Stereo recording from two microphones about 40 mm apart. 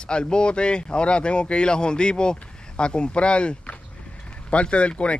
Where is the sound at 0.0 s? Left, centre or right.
Left.